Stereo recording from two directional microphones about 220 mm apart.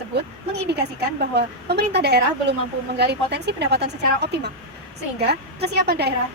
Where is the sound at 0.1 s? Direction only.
50° right (ahead or behind).